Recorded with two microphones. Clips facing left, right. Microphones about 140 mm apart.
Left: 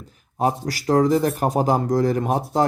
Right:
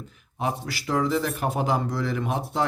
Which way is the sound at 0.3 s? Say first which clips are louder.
Left 7 dB; 40° left (ahead or behind).